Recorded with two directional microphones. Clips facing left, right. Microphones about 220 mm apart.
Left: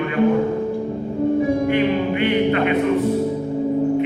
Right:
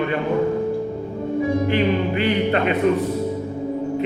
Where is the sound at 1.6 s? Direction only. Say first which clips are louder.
Left 1 dB; 30° right (ahead or behind).